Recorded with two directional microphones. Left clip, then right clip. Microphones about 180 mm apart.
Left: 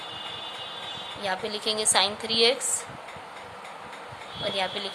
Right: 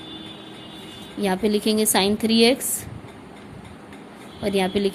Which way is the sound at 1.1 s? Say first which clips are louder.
Right 8 dB; 40° right (ahead or behind).